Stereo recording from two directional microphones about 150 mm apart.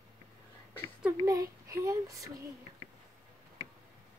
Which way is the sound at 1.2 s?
20° right (ahead or behind).